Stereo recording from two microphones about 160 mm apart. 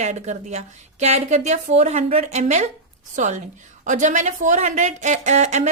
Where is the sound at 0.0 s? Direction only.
45° right (ahead or behind).